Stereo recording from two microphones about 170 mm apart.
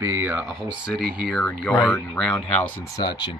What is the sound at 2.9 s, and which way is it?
Speech, 25° left (ahead or behind).